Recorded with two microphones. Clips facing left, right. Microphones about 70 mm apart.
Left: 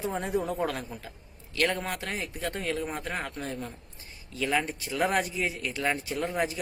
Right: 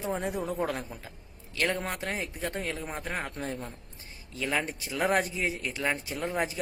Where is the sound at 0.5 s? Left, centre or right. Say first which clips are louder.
Left 1 dB; centre.